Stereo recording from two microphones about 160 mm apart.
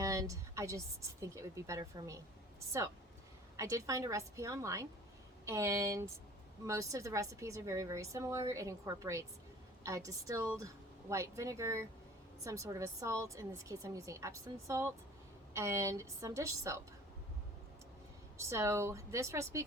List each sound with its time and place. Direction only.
0.0 s a sound: 20° right (ahead or behind)
1.2 s a woman's voice: 20° right (ahead or behind)
3.6 s a woman's voice: 20° right (ahead or behind)
18.3 s a woman's voice: 15° right (ahead or behind)